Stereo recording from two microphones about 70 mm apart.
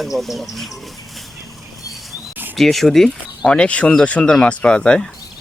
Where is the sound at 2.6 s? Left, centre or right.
Centre.